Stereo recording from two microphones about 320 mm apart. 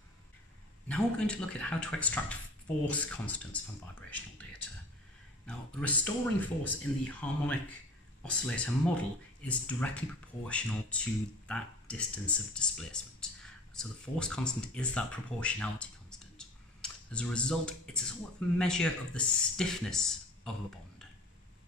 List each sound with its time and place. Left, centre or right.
0.8 s speech: centre
5.5 s speech: centre